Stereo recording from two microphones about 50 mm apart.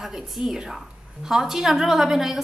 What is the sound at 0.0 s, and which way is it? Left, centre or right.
A woman's voice, centre.